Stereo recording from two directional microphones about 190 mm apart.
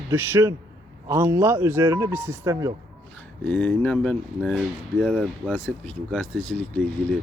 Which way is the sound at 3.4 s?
10° left (ahead or behind).